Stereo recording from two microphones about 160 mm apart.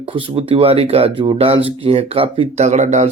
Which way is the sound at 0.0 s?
35° right (ahead or behind).